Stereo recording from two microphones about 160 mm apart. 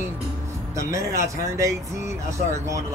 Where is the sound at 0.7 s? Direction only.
20° right (ahead or behind).